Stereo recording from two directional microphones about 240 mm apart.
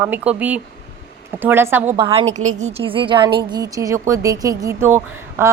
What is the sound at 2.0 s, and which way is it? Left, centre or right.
A woman's voice, right.